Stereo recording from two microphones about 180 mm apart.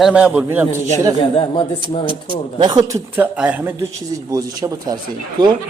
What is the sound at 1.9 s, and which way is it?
Speech, 30° left (ahead or behind).